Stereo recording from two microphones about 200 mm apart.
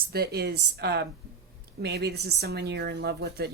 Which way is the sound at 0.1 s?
55° right (ahead or behind).